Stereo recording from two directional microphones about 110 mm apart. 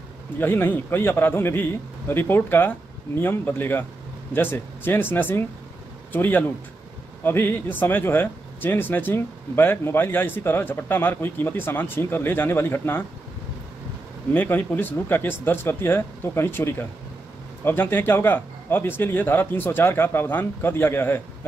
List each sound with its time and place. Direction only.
0.4 s speech: 20° left (ahead or behind)
14.3 s speech: 15° left (ahead or behind)